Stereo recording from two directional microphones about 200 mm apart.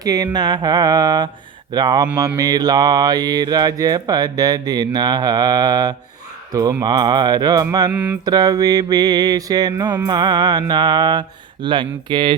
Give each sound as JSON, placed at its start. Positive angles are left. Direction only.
{"t": 0.0, "sound": "music", "side_deg": -20}
{"t": 7.9, "sound": "mantra", "side_deg": -5}
{"t": 8.2, "sound": "music", "side_deg": -20}